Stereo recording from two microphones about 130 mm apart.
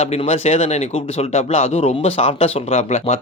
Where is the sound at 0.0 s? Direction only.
55° left (ahead or behind).